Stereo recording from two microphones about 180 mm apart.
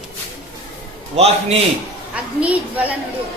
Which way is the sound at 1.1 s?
35° right (ahead or behind).